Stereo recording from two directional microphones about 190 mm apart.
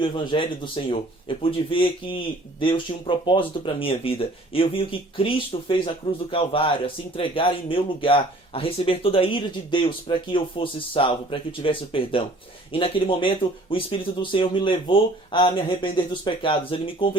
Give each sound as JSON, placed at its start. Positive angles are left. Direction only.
{"t": 0.0, "sound": "speech", "side_deg": 25}